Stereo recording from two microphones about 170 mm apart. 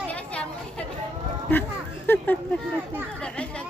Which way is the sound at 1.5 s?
10° left (ahead or behind).